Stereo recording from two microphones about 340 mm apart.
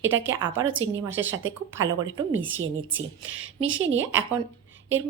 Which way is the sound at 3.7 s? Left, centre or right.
Right.